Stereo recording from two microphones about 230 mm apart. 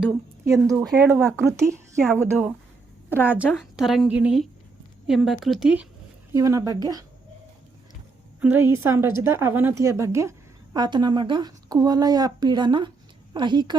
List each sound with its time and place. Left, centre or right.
0.4 s a woman's voice: centre
8.4 s a woman's voice: centre